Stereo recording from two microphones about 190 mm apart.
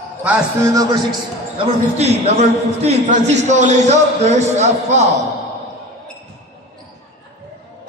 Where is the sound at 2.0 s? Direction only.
35° right (ahead or behind).